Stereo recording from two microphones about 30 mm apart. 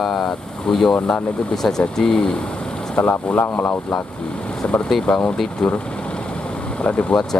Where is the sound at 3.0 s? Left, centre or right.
Left.